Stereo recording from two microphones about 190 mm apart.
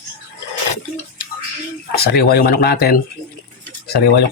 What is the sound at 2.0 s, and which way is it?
Speech, 55° left (ahead or behind).